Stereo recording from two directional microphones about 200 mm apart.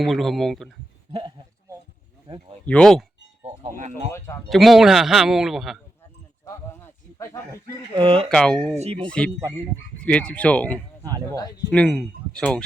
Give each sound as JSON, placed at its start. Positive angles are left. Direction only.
{"t": 0.0, "sound": "a man's voice", "side_deg": 0}
{"t": 2.2, "sound": "a sound", "side_deg": -20}
{"t": 2.6, "sound": "a man's voice", "side_deg": 5}
{"t": 3.8, "sound": "speech", "side_deg": -35}
{"t": 4.4, "sound": "a man's voice", "side_deg": 0}
{"t": 6.4, "sound": "a sound", "side_deg": 15}
{"t": 7.5, "sound": "speech", "side_deg": -25}
{"t": 8.3, "sound": "a man's voice", "side_deg": 5}